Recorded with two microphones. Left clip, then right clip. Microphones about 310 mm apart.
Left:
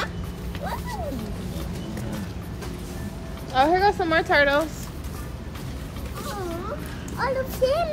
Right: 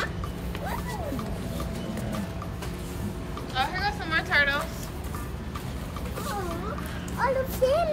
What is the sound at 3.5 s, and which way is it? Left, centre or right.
Speech, centre.